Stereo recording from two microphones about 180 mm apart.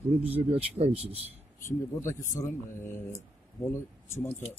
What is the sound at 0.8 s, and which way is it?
Speech, 35° right (ahead or behind).